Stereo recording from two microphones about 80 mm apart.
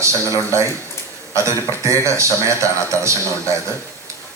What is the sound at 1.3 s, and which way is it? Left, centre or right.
Speech, right.